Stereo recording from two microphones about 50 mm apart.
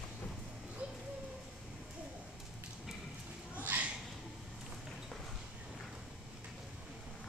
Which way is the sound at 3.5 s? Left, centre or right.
Right.